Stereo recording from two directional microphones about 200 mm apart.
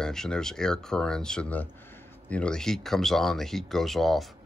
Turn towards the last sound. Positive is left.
turn(degrees=0)  # may be behind; listen again after turning